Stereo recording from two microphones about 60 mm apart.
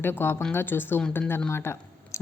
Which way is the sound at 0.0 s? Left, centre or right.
Left.